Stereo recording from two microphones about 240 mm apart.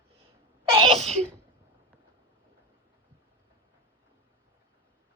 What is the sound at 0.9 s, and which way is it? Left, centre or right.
Sneeze, centre.